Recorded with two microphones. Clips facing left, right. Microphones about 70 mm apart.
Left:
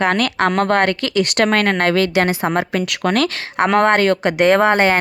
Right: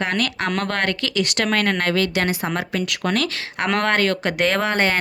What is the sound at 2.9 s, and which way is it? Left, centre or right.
Speech, left.